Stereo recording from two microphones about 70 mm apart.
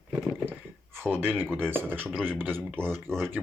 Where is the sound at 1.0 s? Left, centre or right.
Right.